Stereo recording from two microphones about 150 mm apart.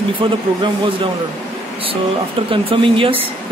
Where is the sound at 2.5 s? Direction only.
35° right (ahead or behind).